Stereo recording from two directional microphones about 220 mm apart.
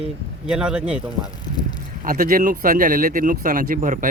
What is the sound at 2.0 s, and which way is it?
Speech, 40° right (ahead or behind).